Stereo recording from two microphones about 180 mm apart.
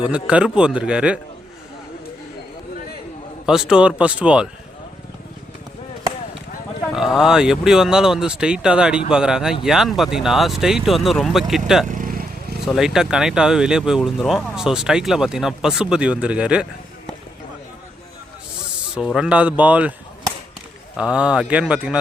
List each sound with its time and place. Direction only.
0.0 s speech: 5° right (ahead or behind)
3.4 s speech: 5° right (ahead or behind)
6.9 s speech: centre (ahead or behind)
11.9 s vehicle: 50° right (ahead or behind)
12.6 s speech: centre (ahead or behind)
18.9 s speech: 5° right (ahead or behind)
20.9 s speech: 5° right (ahead or behind)